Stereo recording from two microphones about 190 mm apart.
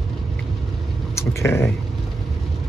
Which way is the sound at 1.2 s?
15° left (ahead or behind).